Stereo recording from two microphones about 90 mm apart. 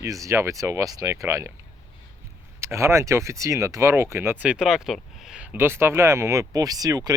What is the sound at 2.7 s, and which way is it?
Speech, 30° right (ahead or behind).